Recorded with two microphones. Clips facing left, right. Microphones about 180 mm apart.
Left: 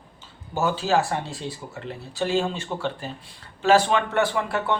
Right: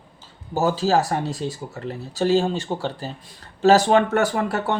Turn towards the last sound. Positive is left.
turn(degrees=-45)  # may be behind; listen again after turning